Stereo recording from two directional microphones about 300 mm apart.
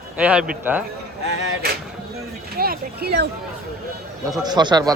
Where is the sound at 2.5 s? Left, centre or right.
Right.